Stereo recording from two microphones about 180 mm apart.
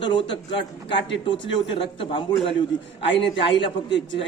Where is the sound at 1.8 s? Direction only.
30° left (ahead or behind).